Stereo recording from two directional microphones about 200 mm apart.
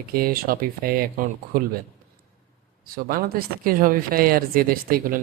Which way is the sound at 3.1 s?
45° right (ahead or behind).